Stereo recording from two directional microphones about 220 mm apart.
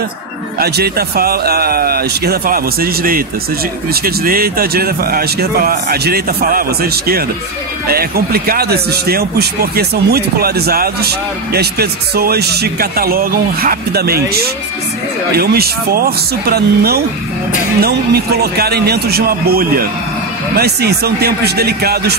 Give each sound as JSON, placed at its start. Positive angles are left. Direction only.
{"t": 0.6, "sound": "speech", "side_deg": -45}